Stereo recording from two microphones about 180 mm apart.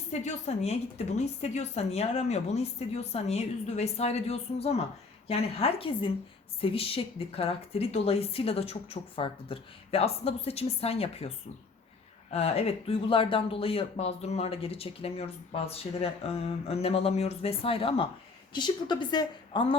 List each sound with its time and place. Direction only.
0.1 s speech: 40° left (ahead or behind)
12.3 s a woman's voice: 35° left (ahead or behind)